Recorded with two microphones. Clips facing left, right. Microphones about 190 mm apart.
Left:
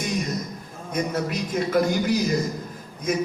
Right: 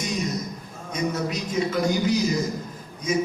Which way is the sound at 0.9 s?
55° left (ahead or behind).